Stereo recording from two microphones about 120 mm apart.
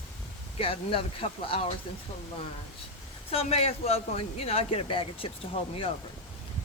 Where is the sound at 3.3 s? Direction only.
55° left (ahead or behind).